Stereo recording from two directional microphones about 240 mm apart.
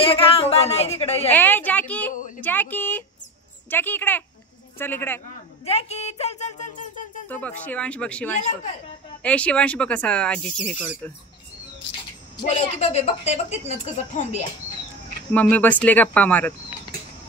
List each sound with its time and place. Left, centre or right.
0.0 s a woman's voice: left
1.3 s speech: centre
2.1 s speech: left
2.4 s speech: centre
5.7 s a sound: left
7.2 s speech: centre
8.4 s a woman's voice: left
9.2 s speech: centre
12.4 s a woman's voice: left
15.3 s speech: centre